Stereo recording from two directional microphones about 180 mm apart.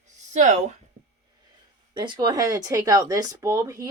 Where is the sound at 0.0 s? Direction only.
40° right (ahead or behind).